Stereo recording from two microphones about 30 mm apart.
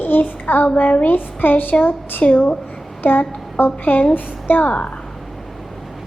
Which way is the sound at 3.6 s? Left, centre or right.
Left.